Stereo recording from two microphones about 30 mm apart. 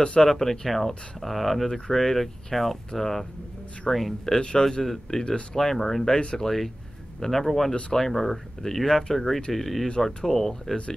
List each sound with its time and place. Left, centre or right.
0.0 s speech: left
0.3 s speech: centre
1.7 s speech: centre
4.4 s a man's voice: left
5.5 s speech: centre
6.1 s speech: left
7.2 s speech: centre